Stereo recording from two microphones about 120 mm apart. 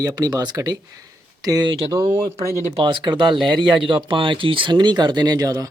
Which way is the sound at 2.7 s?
40° right (ahead or behind).